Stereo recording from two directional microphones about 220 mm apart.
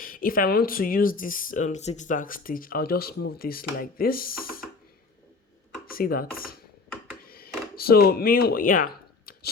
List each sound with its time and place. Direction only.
0.0 s speech: 40° left (ahead or behind)
5.8 s speech: 40° left (ahead or behind)
7.3 s a sound: 45° left (ahead or behind)